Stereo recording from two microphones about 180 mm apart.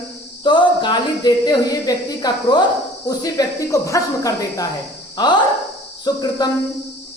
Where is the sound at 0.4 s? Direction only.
25° left (ahead or behind).